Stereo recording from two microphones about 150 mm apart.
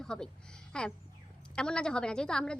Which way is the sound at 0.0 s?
5° left (ahead or behind).